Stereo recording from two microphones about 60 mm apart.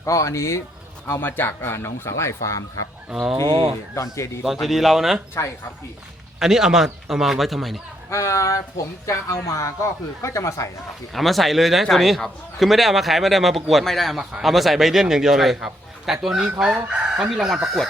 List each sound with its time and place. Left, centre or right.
0.0 s speech: left
1.2 s speech: left
3.1 s chicken: centre
3.9 s speech: left
4.6 s a man's voice: centre
6.4 s a man's voice: centre
8.1 s speech: left
11.1 s a man's voice: centre
16.4 s chicken: centre